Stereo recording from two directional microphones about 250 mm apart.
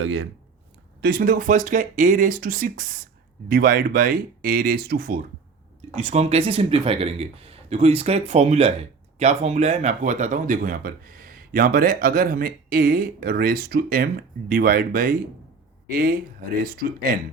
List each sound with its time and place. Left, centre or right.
0.0 s speech: right
1.0 s speech: right